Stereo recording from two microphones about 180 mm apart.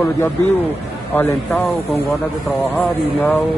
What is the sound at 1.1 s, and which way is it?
Speech, 10° left (ahead or behind).